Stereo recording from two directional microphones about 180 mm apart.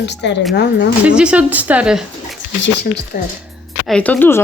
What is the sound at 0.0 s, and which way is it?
Speech, 70° left (ahead or behind).